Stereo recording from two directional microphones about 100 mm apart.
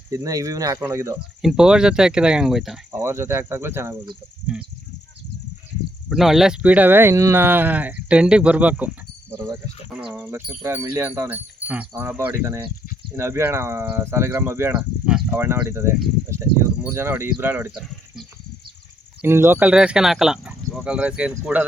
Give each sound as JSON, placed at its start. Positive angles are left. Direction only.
{"t": 0.1, "sound": "speech", "side_deg": -35}
{"t": 1.4, "sound": "speech", "side_deg": -5}
{"t": 2.9, "sound": "speech", "side_deg": -25}
{"t": 4.5, "sound": "speech", "side_deg": -5}
{"t": 6.1, "sound": "speech", "side_deg": 0}
{"t": 10.6, "sound": "speech", "side_deg": -25}
{"t": 11.9, "sound": "speech", "side_deg": -25}
{"t": 14.7, "sound": "speech", "side_deg": -10}
{"t": 15.3, "sound": "speech", "side_deg": -25}
{"t": 19.2, "sound": "speech", "side_deg": -25}